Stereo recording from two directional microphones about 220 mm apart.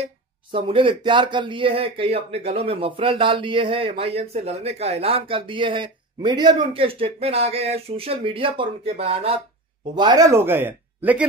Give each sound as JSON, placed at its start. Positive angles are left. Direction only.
{"t": 0.0, "sound": "speech", "side_deg": -25}